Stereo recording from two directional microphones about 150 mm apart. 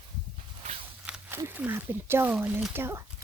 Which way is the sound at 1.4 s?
15° right (ahead or behind).